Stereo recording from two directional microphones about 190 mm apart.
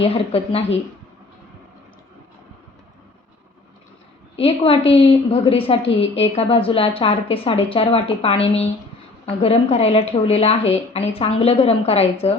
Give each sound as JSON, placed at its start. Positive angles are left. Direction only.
{"t": 0.0, "sound": "a woman's voice", "side_deg": 30}
{"t": 4.4, "sound": "a woman's voice", "side_deg": 30}